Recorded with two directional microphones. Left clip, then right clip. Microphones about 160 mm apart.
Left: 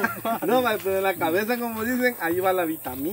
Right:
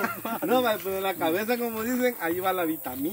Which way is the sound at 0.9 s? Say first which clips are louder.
Left 4 dB; 15° right (ahead or behind).